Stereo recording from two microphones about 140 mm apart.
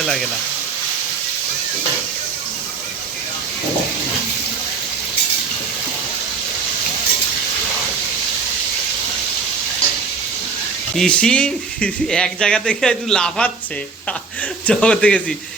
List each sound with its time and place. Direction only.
0.0 s speech: centre (ahead or behind)
10.9 s speech: 5° left (ahead or behind)
14.7 s a man's voice: 5° left (ahead or behind)